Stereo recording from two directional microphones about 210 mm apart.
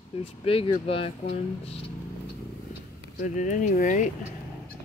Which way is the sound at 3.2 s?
35° left (ahead or behind).